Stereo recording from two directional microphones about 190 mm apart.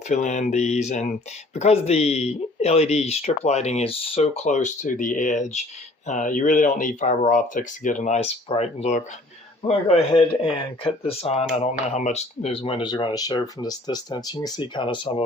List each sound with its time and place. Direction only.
0.1 s speech: 40° left (ahead or behind)